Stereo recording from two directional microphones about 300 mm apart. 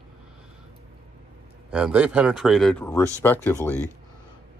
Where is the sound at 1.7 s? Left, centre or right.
Centre.